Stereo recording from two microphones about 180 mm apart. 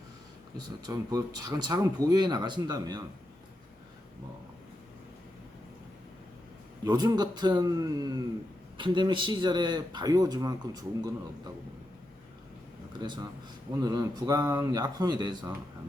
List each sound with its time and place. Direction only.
0.9 s speech: 20° right (ahead or behind)
6.8 s speech: 20° right (ahead or behind)
13.8 s speech: 20° right (ahead or behind)